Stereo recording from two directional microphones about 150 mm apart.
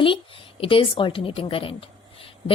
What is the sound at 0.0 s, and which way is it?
A woman's voice, 35° left (ahead or behind).